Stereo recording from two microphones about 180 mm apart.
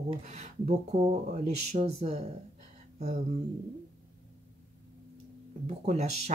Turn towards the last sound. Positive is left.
turn(degrees=-40)  # may be behind; listen again after turning